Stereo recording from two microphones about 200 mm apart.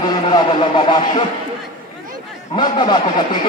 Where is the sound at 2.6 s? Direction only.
25° left (ahead or behind).